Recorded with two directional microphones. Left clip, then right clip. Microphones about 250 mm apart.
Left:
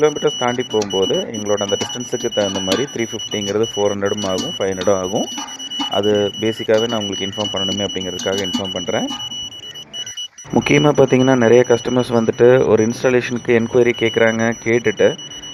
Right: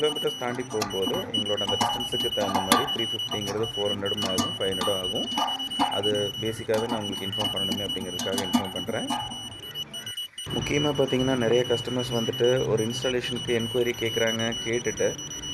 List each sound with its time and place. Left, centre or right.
0.0 s speech: left
10.7 s speech: left